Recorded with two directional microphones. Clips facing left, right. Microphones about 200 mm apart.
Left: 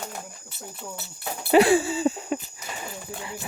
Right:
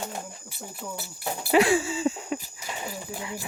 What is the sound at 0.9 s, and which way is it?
Speech, 25° left (ahead or behind).